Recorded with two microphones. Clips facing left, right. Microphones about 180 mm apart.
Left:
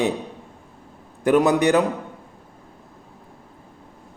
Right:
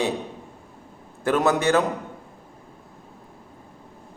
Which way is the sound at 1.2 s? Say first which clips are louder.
Left 4 dB; 15° left (ahead or behind).